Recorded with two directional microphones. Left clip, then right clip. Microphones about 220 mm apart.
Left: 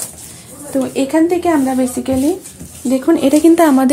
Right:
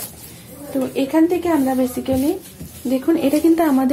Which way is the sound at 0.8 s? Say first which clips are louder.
Left 3 dB; 35° left (ahead or behind).